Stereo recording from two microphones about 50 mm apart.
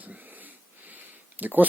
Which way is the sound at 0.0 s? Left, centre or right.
Right.